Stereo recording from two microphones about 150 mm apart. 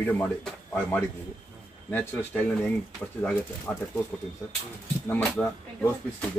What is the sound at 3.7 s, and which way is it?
Speech, 10° left (ahead or behind).